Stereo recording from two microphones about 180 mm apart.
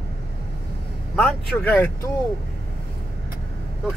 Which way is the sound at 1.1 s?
5° left (ahead or behind).